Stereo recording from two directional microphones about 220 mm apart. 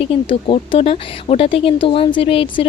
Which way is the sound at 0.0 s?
25° left (ahead or behind).